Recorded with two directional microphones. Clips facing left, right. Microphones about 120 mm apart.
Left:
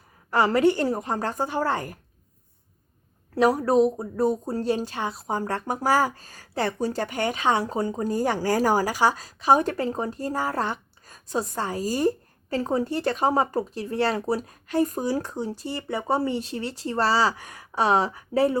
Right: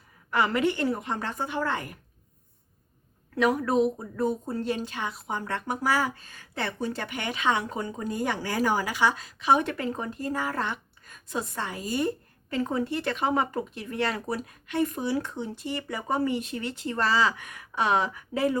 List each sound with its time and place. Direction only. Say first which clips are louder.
0.3 s speech: left 5 dB; 35° left (ahead or behind)
3.3 s speech: left 4 dB; 35° left (ahead or behind)